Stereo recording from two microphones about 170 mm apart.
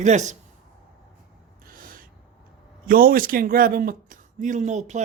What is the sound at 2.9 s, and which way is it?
Speech, 60° right (ahead or behind).